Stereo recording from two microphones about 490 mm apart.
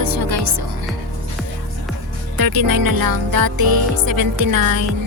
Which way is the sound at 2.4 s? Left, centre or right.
Right.